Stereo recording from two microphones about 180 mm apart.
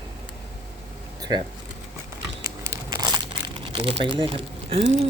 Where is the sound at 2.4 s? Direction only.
15° right (ahead or behind).